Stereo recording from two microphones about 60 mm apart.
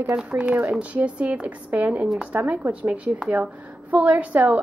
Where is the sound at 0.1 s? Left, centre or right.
Centre.